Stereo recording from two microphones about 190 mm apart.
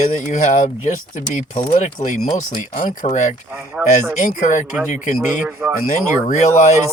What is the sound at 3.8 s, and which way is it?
Speech, 5° right (ahead or behind).